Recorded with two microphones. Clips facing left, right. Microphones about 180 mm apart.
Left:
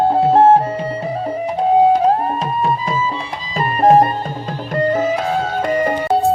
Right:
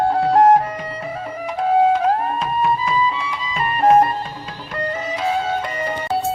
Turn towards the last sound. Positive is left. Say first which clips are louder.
# left 6 dB
turn(degrees=50)  # may be behind; listen again after turning